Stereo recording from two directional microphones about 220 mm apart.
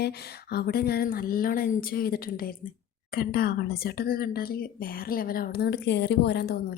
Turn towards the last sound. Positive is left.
turn(degrees=50)  # may be behind; listen again after turning